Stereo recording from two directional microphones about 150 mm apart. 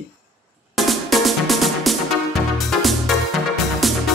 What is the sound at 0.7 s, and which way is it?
Music, centre (ahead or behind).